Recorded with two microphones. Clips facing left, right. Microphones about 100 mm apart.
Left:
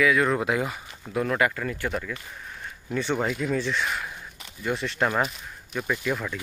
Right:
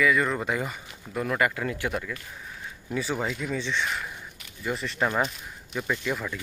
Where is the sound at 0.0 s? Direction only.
Centre (ahead or behind).